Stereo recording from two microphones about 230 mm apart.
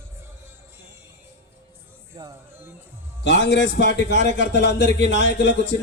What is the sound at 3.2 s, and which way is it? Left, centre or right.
A man's voice, left.